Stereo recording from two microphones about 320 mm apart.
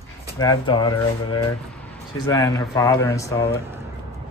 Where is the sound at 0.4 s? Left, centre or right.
Centre.